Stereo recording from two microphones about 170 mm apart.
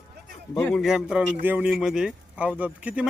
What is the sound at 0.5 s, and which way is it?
Speech, 5° left (ahead or behind).